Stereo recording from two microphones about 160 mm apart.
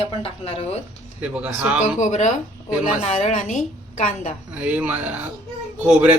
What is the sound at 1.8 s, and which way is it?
A woman's voice, 50° left (ahead or behind).